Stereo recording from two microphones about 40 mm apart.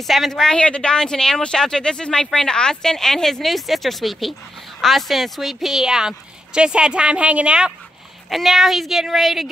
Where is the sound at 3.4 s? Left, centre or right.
Centre.